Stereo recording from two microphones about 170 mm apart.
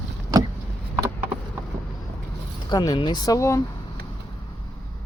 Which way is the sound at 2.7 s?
25° left (ahead or behind).